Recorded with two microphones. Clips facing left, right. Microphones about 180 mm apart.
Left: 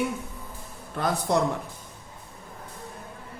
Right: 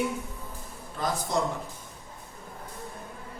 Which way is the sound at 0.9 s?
60° left (ahead or behind).